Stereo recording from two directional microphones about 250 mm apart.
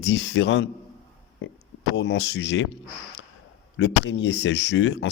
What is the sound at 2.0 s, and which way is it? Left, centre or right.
Speech, left.